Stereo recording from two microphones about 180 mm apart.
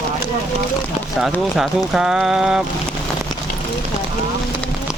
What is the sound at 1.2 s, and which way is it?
Speech, centre (ahead or behind).